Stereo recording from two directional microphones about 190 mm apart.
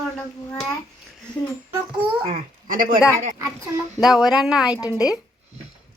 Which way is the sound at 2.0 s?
30° right (ahead or behind).